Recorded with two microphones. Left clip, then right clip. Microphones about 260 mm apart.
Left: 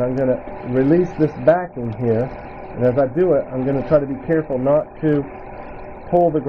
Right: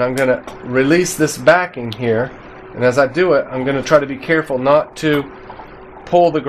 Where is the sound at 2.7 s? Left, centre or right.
Right.